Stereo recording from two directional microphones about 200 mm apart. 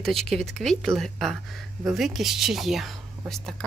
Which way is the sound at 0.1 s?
Centre (ahead or behind).